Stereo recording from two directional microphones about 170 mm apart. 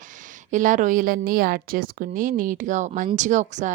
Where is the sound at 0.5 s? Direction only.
50° right (ahead or behind).